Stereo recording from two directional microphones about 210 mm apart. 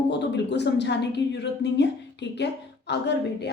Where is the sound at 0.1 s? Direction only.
55° left (ahead or behind).